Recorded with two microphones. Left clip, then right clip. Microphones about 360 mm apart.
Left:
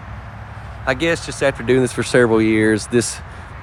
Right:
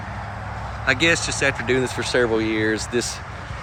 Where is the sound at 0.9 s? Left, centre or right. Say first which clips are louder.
Even; centre.